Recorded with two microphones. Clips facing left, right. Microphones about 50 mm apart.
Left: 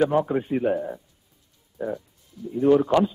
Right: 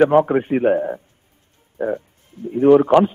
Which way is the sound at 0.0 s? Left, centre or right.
Right.